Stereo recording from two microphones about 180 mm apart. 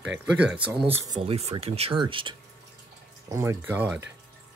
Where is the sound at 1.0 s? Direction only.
25° right (ahead or behind).